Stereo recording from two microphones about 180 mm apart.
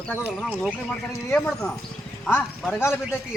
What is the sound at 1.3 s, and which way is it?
A man's voice, 5° left (ahead or behind).